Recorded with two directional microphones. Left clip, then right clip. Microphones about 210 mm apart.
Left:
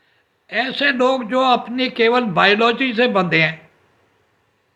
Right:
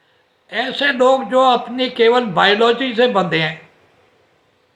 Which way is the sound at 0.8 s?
20° left (ahead or behind).